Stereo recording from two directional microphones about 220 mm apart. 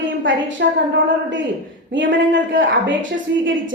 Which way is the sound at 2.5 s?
55° right (ahead or behind).